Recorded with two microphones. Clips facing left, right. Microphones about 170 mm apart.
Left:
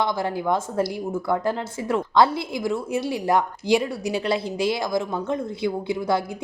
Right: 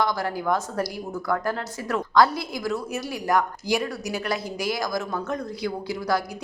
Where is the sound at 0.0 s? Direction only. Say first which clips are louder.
Left 1 dB; 25° left (ahead or behind).